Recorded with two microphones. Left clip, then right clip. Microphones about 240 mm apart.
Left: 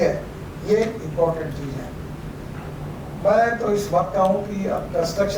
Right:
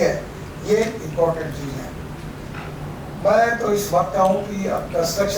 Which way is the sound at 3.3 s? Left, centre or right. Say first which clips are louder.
Right 1 dB; centre.